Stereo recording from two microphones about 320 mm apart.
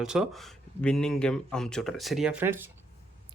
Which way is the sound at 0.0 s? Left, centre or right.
Centre.